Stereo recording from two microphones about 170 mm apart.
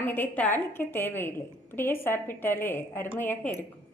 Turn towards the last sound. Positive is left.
turn(degrees=10)  # may be behind; listen again after turning